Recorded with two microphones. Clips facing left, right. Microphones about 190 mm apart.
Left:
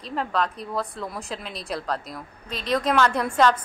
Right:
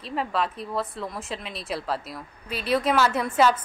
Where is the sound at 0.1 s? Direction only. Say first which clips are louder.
Left 1 dB; 5° right (ahead or behind).